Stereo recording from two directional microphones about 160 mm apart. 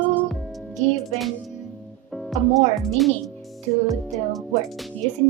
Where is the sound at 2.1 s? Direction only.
Centre (ahead or behind).